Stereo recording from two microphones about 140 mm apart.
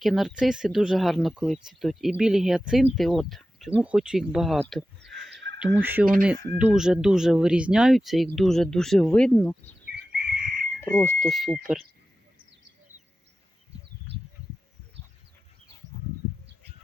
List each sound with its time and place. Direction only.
0.0 s speech: centre (ahead or behind)
4.7 s a sound: centre (ahead or behind)
5.7 s speech: 10° right (ahead or behind); by 9.7 s 5° left (ahead or behind)
10.1 s chicken: 90° right
10.8 s speech: 10° left (ahead or behind)
11.3 s speech: centre (ahead or behind)